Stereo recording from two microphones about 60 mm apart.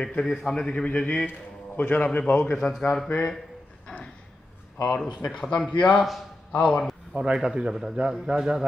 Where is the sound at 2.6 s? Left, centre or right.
Centre.